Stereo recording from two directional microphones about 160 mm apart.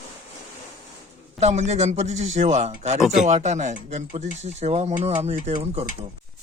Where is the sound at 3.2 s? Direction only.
45° right (ahead or behind).